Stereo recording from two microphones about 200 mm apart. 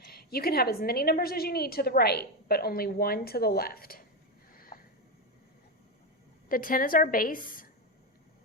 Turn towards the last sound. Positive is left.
turn(degrees=45)  # may be behind; listen again after turning